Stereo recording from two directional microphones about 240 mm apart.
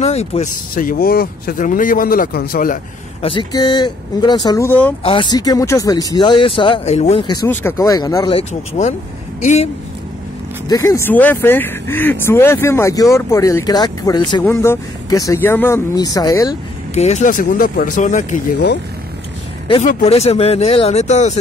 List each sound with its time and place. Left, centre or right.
0.0 s speech: left
3.3 s speech: centre
5.0 s speech: centre
10.7 s speech: centre
16.9 s speech: left
19.7 s speech: left